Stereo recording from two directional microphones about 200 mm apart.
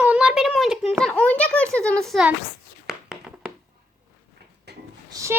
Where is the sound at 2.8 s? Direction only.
Centre (ahead or behind).